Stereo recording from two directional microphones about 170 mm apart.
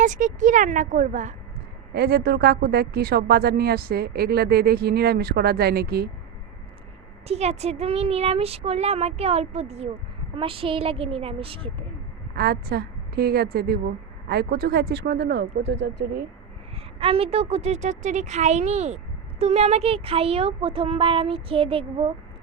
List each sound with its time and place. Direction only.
0.0 s speech: 45° right (ahead or behind)
1.9 s speech: 70° right (ahead or behind)
7.3 s speech: 40° right (ahead or behind)
12.4 s speech: 70° right (ahead or behind); by 16.2 s 85° right
16.7 s speech: 35° right (ahead or behind)